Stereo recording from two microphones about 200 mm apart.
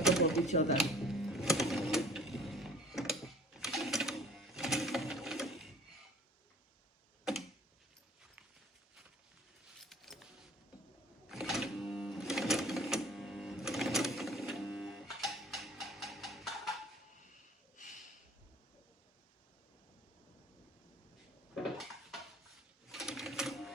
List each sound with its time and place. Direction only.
0.4 s speech: 35° left (ahead or behind)
0.8 s sewing machine: centre (ahead or behind)
9.8 s a sound: centre (ahead or behind)
11.3 s sewing machine: centre (ahead or behind)
21.5 s dishes: centre (ahead or behind)
22.9 s sewing machine: centre (ahead or behind)